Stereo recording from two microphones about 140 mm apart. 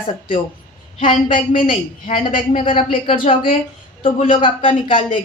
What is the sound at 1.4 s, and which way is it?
A woman's voice, 40° left (ahead or behind).